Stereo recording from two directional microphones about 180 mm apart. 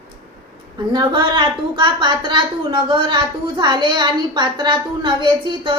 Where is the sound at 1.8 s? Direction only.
25° right (ahead or behind).